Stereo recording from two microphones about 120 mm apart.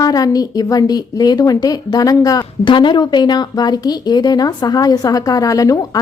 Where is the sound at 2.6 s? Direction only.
40° left (ahead or behind).